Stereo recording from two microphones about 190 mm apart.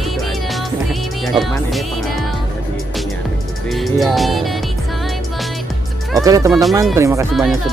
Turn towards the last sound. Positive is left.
turn(degrees=0)  # may be behind; listen again after turning